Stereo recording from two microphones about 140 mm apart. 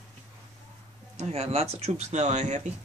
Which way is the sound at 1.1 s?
50° right (ahead or behind).